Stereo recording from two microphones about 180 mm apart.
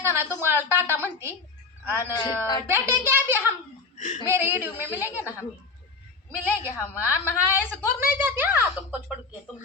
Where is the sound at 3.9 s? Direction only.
45° left (ahead or behind).